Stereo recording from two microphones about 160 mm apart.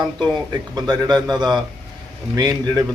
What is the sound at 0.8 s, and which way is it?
Speech, 25° right (ahead or behind).